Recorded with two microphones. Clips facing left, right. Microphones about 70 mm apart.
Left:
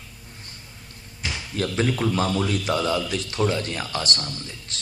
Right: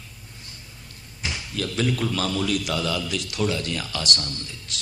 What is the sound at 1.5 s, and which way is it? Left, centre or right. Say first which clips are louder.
A man's voice: left 2 dB; left.